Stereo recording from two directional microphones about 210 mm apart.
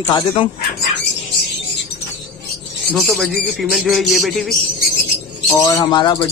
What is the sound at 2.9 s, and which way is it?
Speech, centre (ahead or behind).